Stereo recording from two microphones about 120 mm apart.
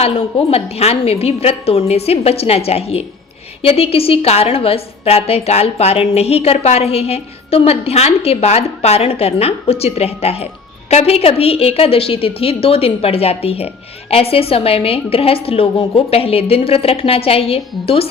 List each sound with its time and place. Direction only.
0.0 s a woman's voice: 55° left (ahead or behind)